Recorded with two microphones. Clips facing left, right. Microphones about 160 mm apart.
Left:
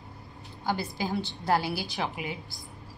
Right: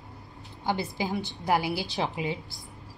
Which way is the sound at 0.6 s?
20° right (ahead or behind).